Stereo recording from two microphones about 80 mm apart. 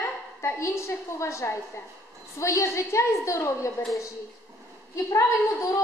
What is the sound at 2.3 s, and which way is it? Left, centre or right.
A woman's voice, left.